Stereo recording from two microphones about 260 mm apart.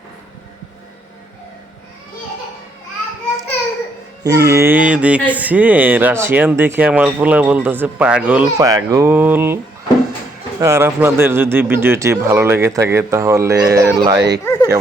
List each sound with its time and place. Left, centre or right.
4.2 s speech: centre
10.6 s speech: centre
14.2 s speech: right
14.4 s bow-wow: centre